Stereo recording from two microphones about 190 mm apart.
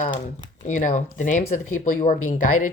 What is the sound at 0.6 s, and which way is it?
Speech, 40° left (ahead or behind).